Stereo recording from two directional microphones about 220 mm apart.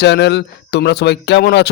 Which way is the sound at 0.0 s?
50° left (ahead or behind).